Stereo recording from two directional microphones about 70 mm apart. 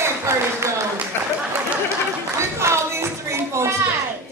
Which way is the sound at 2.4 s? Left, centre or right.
Right.